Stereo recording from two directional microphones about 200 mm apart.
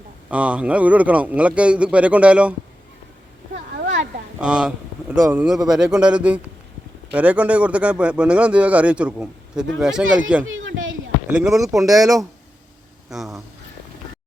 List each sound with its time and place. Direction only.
0.3 s a man's voice: 5° right (ahead or behind)
4.4 s speech: 5° right (ahead or behind)
10.4 s a sound: 80° right
11.3 s speech: 5° right (ahead or behind)
11.9 s a man's voice: 15° right (ahead or behind)
13.1 s speech: centre (ahead or behind)